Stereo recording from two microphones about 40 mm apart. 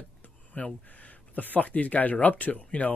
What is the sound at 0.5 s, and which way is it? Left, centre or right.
Speech, left.